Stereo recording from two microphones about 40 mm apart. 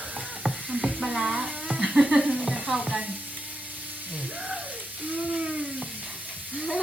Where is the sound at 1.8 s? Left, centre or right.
Centre.